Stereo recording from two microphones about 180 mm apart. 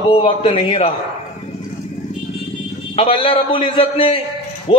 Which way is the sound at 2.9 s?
30° left (ahead or behind).